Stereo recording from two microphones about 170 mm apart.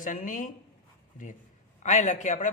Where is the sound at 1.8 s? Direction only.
45° left (ahead or behind).